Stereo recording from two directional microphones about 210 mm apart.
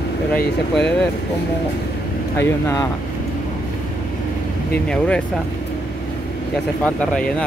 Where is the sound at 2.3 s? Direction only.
15° left (ahead or behind).